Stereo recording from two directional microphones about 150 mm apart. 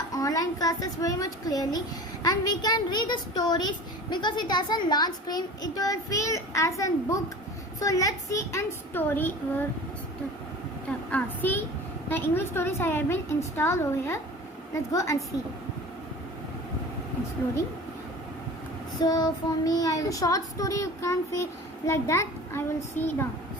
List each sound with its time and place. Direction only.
0.1 s a child's voice: 25° left (ahead or behind)
10.8 s a woman's voice: 10° left (ahead or behind)
18.9 s a child's voice: 25° left (ahead or behind)